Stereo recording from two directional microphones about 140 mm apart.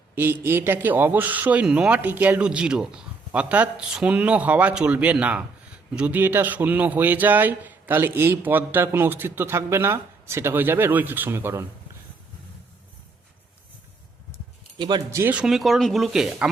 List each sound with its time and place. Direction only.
0.2 s a man's voice: 15° right (ahead or behind)
14.8 s speech: 30° right (ahead or behind)
15.2 s speech: 10° right (ahead or behind)